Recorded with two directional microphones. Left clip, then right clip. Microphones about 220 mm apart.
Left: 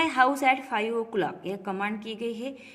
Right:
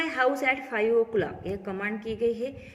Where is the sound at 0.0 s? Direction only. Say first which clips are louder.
Left 3 dB; 40° left (ahead or behind).